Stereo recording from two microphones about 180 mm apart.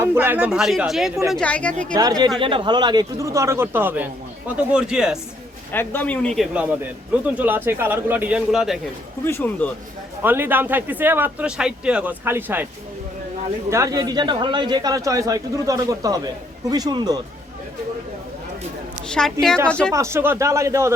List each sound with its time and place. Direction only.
0.0 s speech: 10° right (ahead or behind); by 1.7 s 5° left (ahead or behind)
2.0 s speech: 20° right (ahead or behind); by 5.2 s 5° right (ahead or behind)
5.7 s speech: 10° left (ahead or behind)
9.2 s speech: 10° left (ahead or behind)
10.2 s speech: 10° right (ahead or behind)
13.7 s speech: 15° right (ahead or behind)
19.0 s speech: 5° left (ahead or behind)
19.9 s speech: 15° right (ahead or behind)